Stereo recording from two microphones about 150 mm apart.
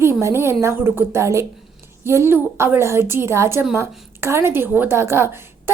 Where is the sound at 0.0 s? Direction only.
15° right (ahead or behind).